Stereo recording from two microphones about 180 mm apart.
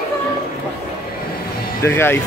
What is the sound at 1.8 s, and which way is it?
Speech, 10° left (ahead or behind).